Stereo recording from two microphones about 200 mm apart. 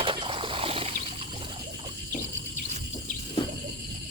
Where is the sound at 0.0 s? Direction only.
25° right (ahead or behind).